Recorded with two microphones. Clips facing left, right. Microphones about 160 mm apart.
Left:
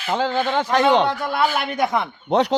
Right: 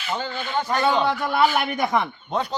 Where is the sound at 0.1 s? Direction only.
90° left.